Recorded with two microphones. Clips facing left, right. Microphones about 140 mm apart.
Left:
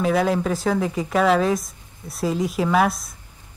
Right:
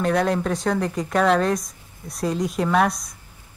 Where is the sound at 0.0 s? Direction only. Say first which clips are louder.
Left 1 dB; centre (ahead or behind).